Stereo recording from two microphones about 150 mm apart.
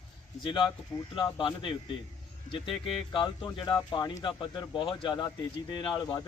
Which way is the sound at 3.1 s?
30° left (ahead or behind).